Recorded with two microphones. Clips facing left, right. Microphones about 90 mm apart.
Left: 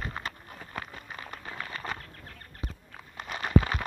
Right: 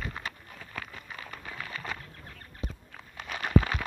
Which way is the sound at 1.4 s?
30° left (ahead or behind).